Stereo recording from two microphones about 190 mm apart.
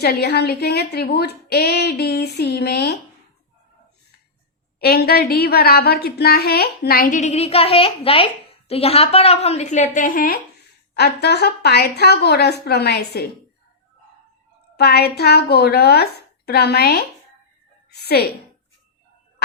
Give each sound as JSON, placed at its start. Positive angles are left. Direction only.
{"t": 0.0, "sound": "a woman's voice", "side_deg": 55}
{"t": 4.8, "sound": "a woman's voice", "side_deg": 55}
{"t": 14.8, "sound": "a woman's voice", "side_deg": 55}